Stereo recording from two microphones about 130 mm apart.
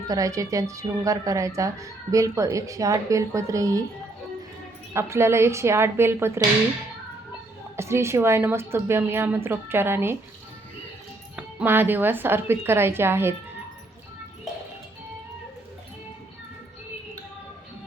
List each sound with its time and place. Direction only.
0.1 s speech: 25° right (ahead or behind)
4.9 s speech: 20° right (ahead or behind)
7.8 s a woman's voice: 20° right (ahead or behind)
11.3 s a woman's voice: 15° right (ahead or behind)